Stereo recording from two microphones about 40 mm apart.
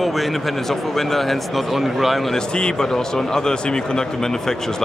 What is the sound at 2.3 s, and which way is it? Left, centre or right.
A man's voice, centre.